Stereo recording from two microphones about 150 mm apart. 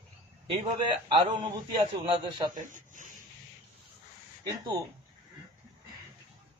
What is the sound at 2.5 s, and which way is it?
Speech, 60° right (ahead or behind).